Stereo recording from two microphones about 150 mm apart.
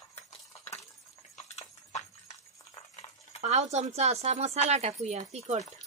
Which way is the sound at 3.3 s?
50° right (ahead or behind).